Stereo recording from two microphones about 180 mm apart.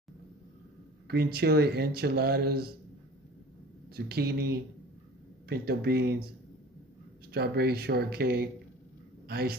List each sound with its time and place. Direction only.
1.0 s speech: 60° right (ahead or behind)
3.9 s speech: 60° right (ahead or behind)
7.3 s speech: 60° right (ahead or behind)